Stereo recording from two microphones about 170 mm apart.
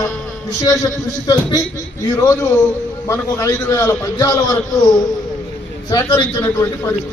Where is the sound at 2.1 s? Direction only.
20° left (ahead or behind).